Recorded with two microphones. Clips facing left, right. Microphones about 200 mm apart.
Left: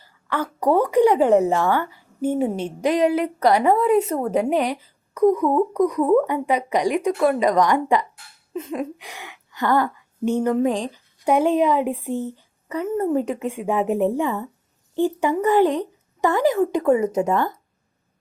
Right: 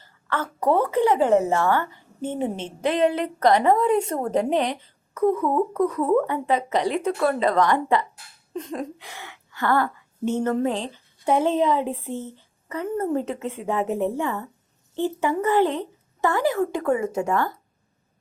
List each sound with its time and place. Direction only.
0.0 s a woman's voice: 15° left (ahead or behind)